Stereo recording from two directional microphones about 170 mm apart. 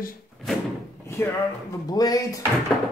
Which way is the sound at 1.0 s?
15° left (ahead or behind).